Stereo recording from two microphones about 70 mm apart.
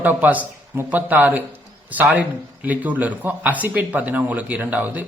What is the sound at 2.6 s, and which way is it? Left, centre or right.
Speech, right.